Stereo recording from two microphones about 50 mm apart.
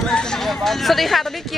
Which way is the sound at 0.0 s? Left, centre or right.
Centre.